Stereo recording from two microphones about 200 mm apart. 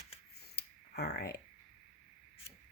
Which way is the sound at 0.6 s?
55° left (ahead or behind).